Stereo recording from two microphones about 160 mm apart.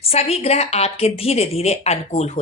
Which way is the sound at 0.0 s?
40° left (ahead or behind).